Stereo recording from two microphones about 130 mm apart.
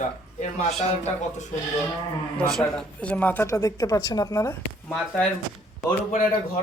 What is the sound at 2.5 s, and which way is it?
Speech, 5° left (ahead or behind).